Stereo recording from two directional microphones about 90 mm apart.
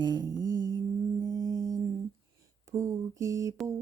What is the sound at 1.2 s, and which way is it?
Music, 45° right (ahead or behind).